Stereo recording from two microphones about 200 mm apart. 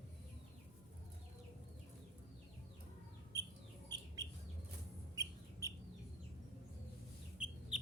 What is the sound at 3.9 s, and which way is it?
Bird, 20° right (ahead or behind).